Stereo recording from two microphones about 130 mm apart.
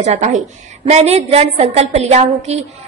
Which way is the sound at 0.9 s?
55° right (ahead or behind).